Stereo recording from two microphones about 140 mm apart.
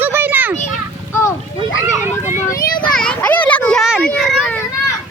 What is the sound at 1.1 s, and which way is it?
Speech, 20° left (ahead or behind).